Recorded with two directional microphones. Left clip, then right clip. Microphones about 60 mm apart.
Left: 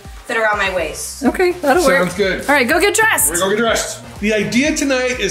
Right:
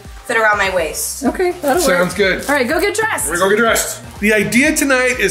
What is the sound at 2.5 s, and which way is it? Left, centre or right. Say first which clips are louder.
Speech: left 2 dB; left.